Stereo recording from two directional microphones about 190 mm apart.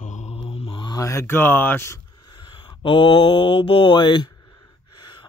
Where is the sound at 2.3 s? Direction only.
25° left (ahead or behind).